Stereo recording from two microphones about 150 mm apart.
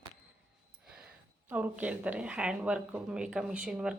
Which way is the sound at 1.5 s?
10° right (ahead or behind).